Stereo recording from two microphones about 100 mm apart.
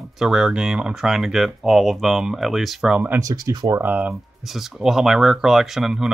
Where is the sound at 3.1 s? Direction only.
35° right (ahead or behind).